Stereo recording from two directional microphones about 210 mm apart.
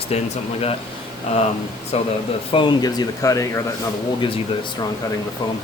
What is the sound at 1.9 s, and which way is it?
Speech, 30° left (ahead or behind).